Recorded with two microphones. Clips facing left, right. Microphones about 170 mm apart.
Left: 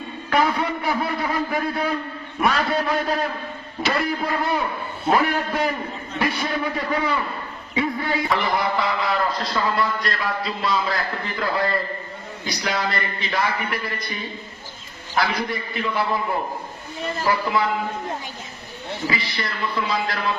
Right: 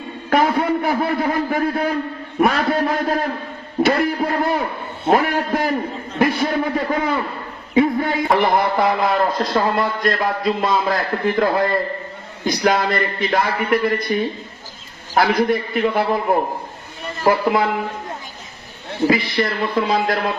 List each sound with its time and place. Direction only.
0.3 s a man's voice: 50° right (ahead or behind)
3.8 s music: 40° right (ahead or behind)
5.1 s a man's voice: 50° right (ahead or behind)
19.0 s a man's voice: 50° right (ahead or behind)